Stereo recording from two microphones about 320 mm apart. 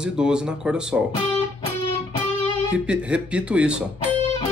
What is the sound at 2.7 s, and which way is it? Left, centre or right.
Speech, centre.